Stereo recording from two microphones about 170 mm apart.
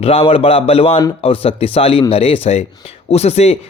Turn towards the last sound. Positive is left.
turn(degrees=40)  # may be behind; listen again after turning